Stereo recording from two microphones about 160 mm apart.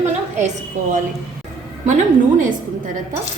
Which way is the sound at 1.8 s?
50° right (ahead or behind).